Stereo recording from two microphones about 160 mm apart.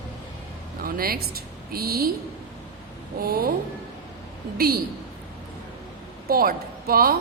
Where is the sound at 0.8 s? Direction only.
70° right (ahead or behind).